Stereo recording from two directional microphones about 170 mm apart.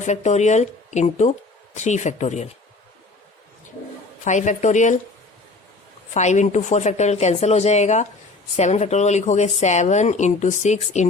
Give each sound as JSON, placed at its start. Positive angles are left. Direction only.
{"t": 0.0, "sound": "a woman's voice", "side_deg": 45}
{"t": 4.2, "sound": "a woman's voice", "side_deg": 45}
{"t": 6.1, "sound": "a woman's voice", "side_deg": 45}